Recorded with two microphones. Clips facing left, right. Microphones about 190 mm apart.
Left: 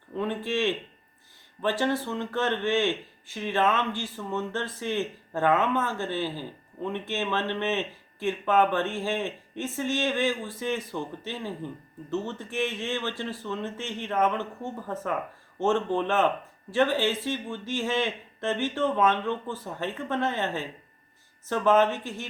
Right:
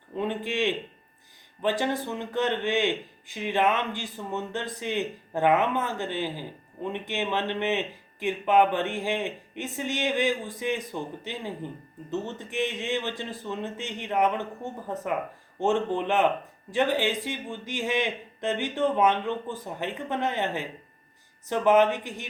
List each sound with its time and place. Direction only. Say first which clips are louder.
0.2 s speech: even; 15° right (ahead or behind)